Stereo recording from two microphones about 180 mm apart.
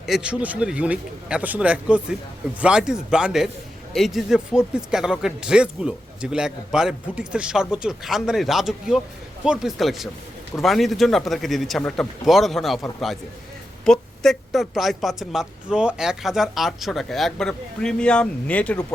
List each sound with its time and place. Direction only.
0.0 s a man's voice: 5° right (ahead or behind)